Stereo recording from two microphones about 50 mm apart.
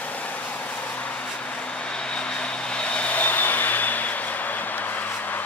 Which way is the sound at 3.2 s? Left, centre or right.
Left.